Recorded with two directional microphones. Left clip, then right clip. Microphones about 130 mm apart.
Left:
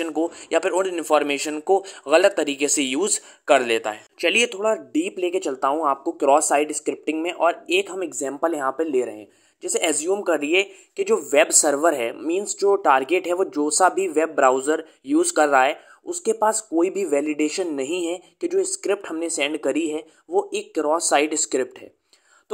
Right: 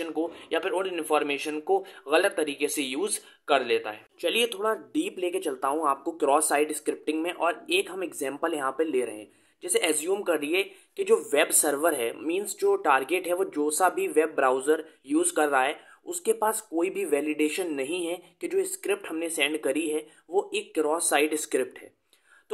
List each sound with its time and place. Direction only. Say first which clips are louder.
0.0 s speech: left 6 dB; 45° left (ahead or behind)
6.1 s speech: left 7 dB; 30° left (ahead or behind)